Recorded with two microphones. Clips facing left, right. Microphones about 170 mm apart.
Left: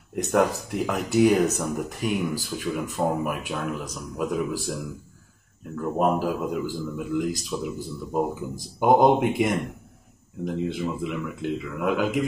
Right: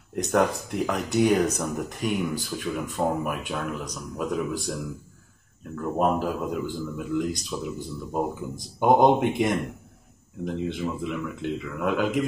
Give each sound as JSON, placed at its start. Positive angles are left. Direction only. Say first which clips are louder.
{"t": 0.1, "sound": "speech", "louder": "left 1 dB", "side_deg": 0}
{"t": 5.8, "sound": "speech", "louder": "left 1 dB", "side_deg": 5}